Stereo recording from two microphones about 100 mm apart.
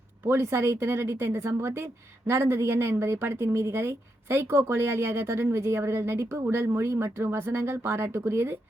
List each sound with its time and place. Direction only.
0.3 s speech: 25° right (ahead or behind)